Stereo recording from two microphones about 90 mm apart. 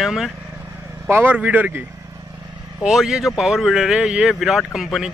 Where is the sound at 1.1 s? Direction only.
20° right (ahead or behind).